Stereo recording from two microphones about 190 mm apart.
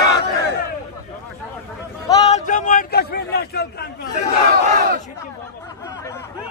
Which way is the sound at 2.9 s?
60° left (ahead or behind).